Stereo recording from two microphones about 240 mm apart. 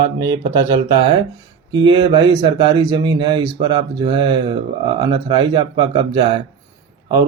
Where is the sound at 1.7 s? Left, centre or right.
Centre.